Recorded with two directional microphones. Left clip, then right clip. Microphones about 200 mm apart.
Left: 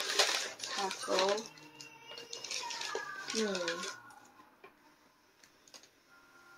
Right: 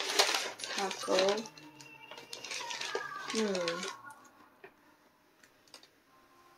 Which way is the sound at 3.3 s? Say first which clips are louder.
Right 1 dB; 15° right (ahead or behind).